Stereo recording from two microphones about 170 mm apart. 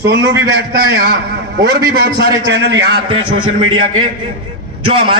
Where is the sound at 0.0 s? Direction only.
75° right (ahead or behind).